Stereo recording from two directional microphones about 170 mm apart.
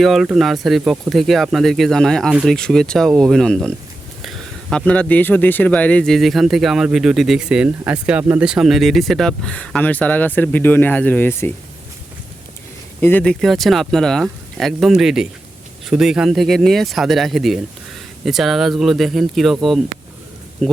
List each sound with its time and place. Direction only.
0.0 s speech: centre (ahead or behind)
13.0 s speech: 10° left (ahead or behind)
20.6 s speech: centre (ahead or behind)